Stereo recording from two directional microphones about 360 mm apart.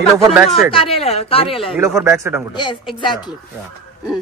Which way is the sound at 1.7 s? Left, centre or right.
Centre.